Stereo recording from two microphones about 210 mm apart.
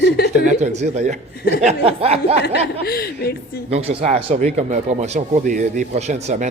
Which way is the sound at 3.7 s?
30° right (ahead or behind).